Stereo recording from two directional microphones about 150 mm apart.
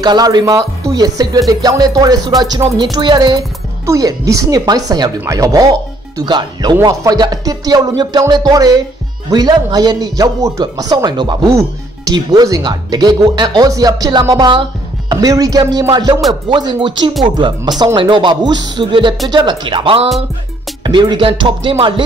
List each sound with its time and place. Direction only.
0.0 s speech: 30° right (ahead or behind)